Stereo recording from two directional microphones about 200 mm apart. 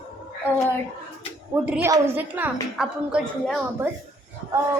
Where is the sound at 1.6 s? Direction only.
10° right (ahead or behind).